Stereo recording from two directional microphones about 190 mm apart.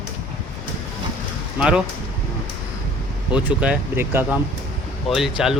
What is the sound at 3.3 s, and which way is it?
Speech, 5° right (ahead or behind).